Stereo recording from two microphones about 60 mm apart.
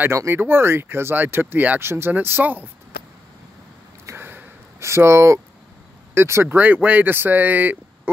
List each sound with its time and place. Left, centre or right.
0.1 s speech: right
4.2 s a sound: right
6.1 s speech: right
6.5 s speech: right